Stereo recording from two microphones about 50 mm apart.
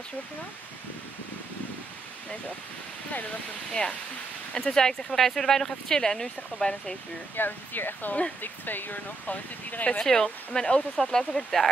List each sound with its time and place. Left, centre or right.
4.6 s speech: centre
7.3 s speech: left
10.0 s speech: centre